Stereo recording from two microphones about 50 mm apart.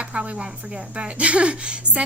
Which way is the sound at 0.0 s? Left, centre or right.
Right.